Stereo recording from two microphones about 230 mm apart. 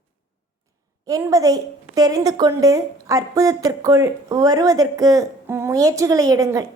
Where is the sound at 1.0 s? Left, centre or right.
Centre.